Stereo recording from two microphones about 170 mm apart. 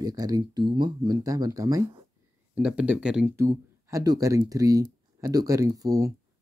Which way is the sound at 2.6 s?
5° right (ahead or behind).